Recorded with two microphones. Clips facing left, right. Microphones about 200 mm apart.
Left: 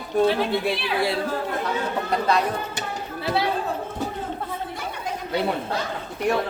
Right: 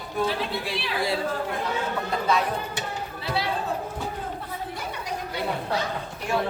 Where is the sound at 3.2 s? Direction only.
55° left (ahead or behind).